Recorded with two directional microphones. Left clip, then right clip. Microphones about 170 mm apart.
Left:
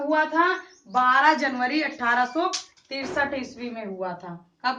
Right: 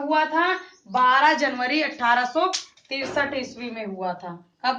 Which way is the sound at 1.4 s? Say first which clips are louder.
Right 2 dB; 30° right (ahead or behind).